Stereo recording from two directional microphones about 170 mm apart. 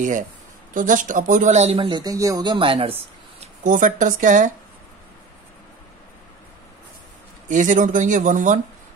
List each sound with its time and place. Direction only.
0.7 s speech: 50° right (ahead or behind); by 2.9 s 30° right (ahead or behind)
3.3 s speech: 50° right (ahead or behind)
7.4 s speech: 50° right (ahead or behind)